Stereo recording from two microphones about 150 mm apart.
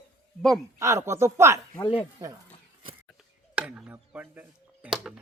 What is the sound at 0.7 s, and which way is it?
Speech, 20° right (ahead or behind).